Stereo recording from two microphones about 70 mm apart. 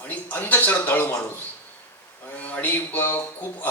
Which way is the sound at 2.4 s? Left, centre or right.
Left.